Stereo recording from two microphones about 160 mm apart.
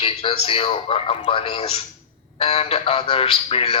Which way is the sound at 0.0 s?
35° left (ahead or behind).